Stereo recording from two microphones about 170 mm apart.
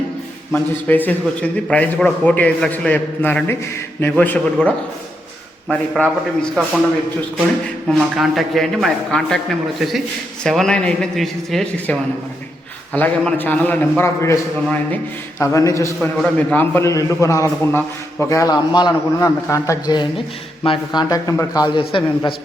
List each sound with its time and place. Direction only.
0.5 s a man's voice: 10° left (ahead or behind)
7.9 s a man's voice: 5° right (ahead or behind); by 22.4 s 30° left (ahead or behind)